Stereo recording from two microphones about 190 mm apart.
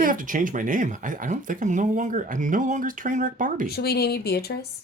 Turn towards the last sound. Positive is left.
turn(degrees=55)  # may be behind; listen again after turning